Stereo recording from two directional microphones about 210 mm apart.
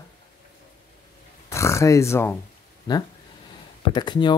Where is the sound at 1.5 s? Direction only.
15° left (ahead or behind).